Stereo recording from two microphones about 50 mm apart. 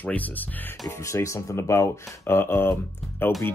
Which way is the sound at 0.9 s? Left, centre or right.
Left.